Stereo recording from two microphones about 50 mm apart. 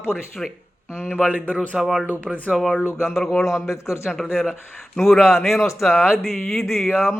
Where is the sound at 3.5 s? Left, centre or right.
Left.